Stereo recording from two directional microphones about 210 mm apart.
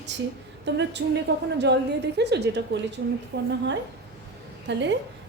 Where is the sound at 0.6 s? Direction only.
55° right (ahead or behind).